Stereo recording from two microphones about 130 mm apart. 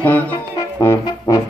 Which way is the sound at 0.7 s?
25° left (ahead or behind).